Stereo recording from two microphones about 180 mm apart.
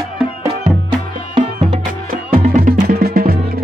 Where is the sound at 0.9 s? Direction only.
30° right (ahead or behind).